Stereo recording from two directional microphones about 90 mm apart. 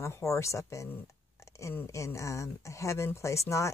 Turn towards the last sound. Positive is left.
turn(degrees=35)  # may be behind; listen again after turning